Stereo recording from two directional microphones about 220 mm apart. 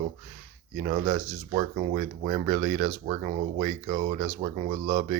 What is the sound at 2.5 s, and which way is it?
Speech, 35° right (ahead or behind).